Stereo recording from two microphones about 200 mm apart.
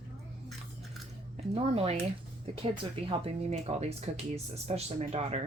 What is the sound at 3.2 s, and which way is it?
Speech, 30° right (ahead or behind).